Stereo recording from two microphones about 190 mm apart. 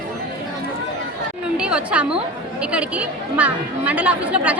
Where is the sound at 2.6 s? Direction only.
5° right (ahead or behind).